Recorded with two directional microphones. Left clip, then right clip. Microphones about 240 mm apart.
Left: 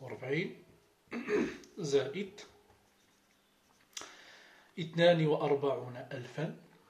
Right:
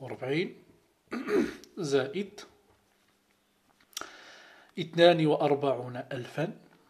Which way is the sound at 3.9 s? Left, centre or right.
Right.